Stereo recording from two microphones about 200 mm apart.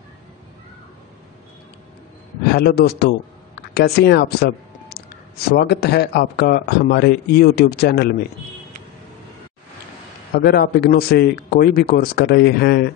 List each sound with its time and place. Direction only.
2.5 s a man's voice: 55° left (ahead or behind)
10.3 s a man's voice: 50° left (ahead or behind)